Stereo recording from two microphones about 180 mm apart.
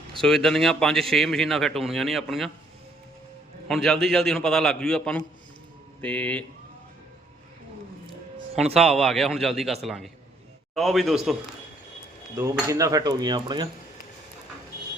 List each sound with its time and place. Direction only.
0.2 s a man's voice: 5° left (ahead or behind)
3.7 s a man's voice: centre (ahead or behind)
8.8 s a man's voice: centre (ahead or behind)
12.4 s cutlery: 15° right (ahead or behind)